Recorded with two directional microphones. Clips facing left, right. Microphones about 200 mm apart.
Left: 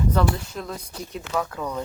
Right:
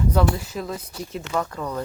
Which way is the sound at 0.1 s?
10° right (ahead or behind).